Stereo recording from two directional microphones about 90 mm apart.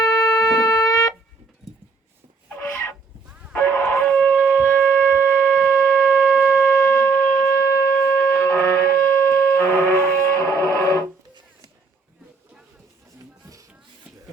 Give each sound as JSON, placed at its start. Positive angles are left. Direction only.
{"t": 0.2, "sound": "shofar", "side_deg": 40}
{"t": 2.6, "sound": "a sound", "side_deg": 25}
{"t": 3.5, "sound": "music", "side_deg": 25}
{"t": 4.6, "sound": "shofar", "side_deg": 25}
{"t": 5.6, "sound": "wind instrument", "side_deg": 20}
{"t": 6.9, "sound": "shofar", "side_deg": 25}
{"t": 9.0, "sound": "wind instrument", "side_deg": 20}